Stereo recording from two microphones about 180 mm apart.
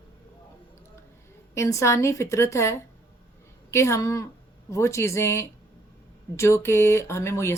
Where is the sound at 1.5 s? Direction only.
15° left (ahead or behind).